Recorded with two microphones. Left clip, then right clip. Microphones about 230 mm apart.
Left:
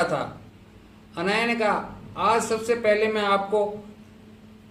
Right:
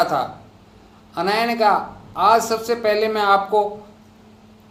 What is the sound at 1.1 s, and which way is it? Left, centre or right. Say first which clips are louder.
Speech: right 4 dB; centre.